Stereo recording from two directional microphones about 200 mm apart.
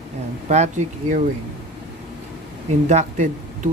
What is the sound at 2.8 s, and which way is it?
Speech, 35° right (ahead or behind).